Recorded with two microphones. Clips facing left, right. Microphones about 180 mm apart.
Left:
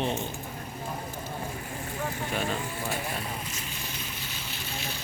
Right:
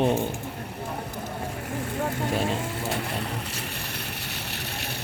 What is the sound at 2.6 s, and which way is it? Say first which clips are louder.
Vehicle: right 3 dB; 85° right.